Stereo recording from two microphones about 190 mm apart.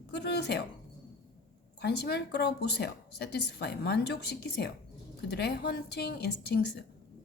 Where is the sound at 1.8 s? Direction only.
60° left (ahead or behind).